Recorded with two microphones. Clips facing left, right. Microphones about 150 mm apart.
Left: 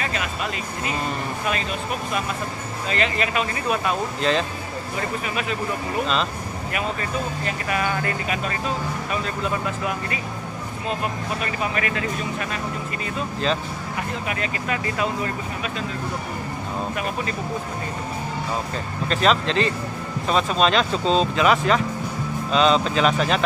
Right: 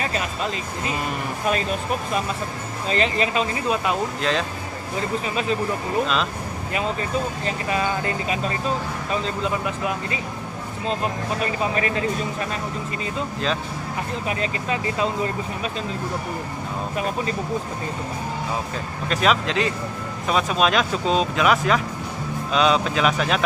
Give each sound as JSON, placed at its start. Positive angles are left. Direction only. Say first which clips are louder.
{"t": 2.9, "sound": "speech", "louder": "right 2 dB", "side_deg": -30}
{"t": 4.2, "sound": "speech", "louder": "left 2 dB", "side_deg": 0}
{"t": 7.4, "sound": "speech", "louder": "right 1 dB", "side_deg": -25}
{"t": 11.7, "sound": "speech", "louder": "right 2 dB", "side_deg": -30}
{"t": 14.4, "sound": "speech", "louder": "right 1 dB", "side_deg": -25}
{"t": 19.0, "sound": "speech", "louder": "left 1 dB", "side_deg": -5}